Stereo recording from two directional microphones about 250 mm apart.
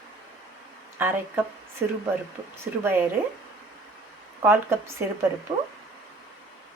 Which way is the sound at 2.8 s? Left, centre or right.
Centre.